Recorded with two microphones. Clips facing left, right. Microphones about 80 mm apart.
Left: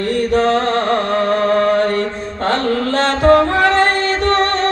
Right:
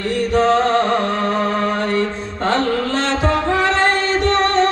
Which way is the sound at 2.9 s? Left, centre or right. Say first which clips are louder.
Left 6 dB; left.